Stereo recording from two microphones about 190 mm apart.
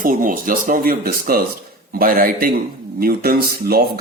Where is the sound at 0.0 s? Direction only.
45° right (ahead or behind).